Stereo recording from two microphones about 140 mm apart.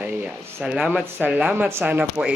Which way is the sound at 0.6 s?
10° right (ahead or behind).